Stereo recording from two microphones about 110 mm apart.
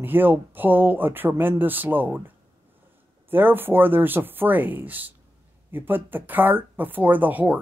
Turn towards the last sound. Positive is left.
turn(degrees=-15)  # may be behind; listen again after turning